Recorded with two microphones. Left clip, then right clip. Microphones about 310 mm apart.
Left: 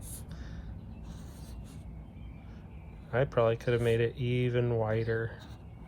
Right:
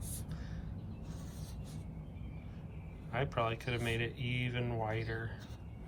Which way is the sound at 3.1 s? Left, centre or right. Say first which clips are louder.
Left 8 dB; centre.